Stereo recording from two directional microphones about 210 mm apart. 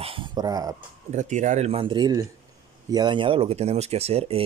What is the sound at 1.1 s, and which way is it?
Speech, 35° right (ahead or behind).